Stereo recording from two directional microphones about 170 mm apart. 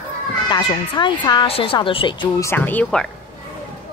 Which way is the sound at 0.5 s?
30° left (ahead or behind).